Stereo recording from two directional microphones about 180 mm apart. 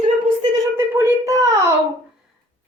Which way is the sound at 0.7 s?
15° right (ahead or behind).